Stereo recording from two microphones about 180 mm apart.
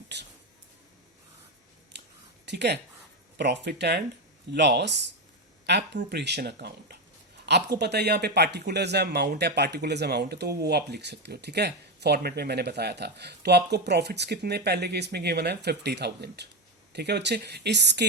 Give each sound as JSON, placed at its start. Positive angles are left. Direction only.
{"t": 0.1, "sound": "speech", "side_deg": -70}
{"t": 2.5, "sound": "speech", "side_deg": -70}